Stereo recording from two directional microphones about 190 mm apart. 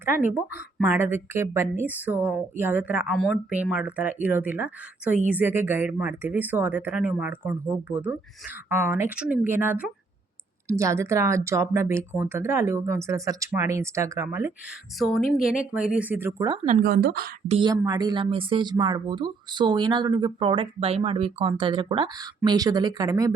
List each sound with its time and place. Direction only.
0.0 s speech: 10° right (ahead or behind)
14.9 s speech: centre (ahead or behind)
16.8 s speech: 55° right (ahead or behind)
17.5 s speech: 20° right (ahead or behind)